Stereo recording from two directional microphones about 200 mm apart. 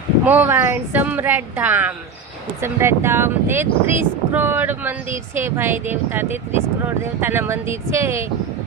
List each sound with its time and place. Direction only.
0.3 s speech: 10° right (ahead or behind)